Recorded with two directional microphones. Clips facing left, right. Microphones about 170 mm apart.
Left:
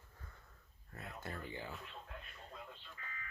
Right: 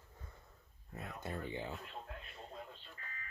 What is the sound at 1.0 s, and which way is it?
Speech, 20° right (ahead or behind).